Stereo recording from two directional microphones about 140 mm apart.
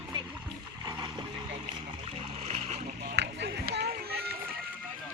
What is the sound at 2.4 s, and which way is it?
Boat, 50° right (ahead or behind).